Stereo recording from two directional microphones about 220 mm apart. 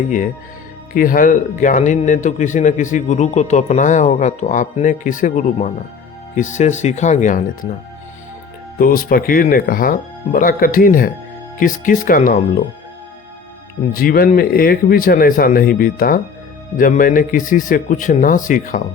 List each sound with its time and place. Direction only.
0.9 s a man's voice: 40° left (ahead or behind)
8.8 s a man's voice: 40° left (ahead or behind)
13.9 s a man's voice: 40° left (ahead or behind)